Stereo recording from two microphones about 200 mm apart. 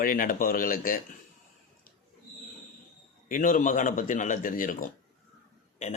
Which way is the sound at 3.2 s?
40° left (ahead or behind).